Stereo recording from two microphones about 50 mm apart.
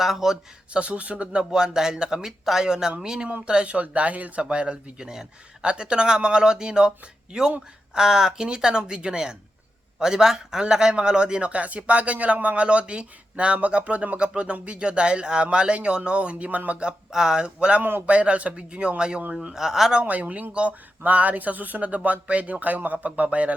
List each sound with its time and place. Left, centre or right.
0.0 s speech: centre
0.7 s a man's voice: right
16.8 s a man's voice: centre
20.0 s speech: right
21.0 s speech: right